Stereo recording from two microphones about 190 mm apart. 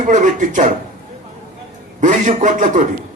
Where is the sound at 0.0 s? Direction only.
40° right (ahead or behind).